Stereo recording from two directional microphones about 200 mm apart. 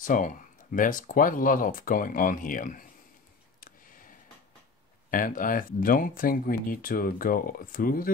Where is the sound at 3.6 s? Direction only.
45° left (ahead or behind).